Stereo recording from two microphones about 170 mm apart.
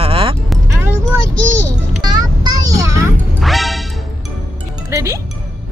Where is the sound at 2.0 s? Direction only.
25° right (ahead or behind).